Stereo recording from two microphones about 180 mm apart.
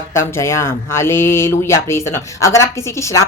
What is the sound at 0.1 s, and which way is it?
Speech, 15° left (ahead or behind).